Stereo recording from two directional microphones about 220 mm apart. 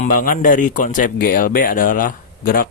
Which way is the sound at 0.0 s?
35° left (ahead or behind).